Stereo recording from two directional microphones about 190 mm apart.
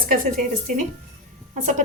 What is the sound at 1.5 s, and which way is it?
Speech, 40° right (ahead or behind).